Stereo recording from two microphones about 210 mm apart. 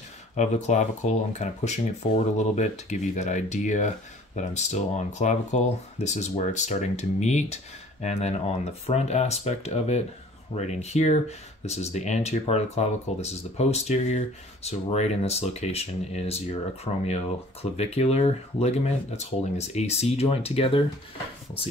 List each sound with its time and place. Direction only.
0.4 s speech: 35° left (ahead or behind)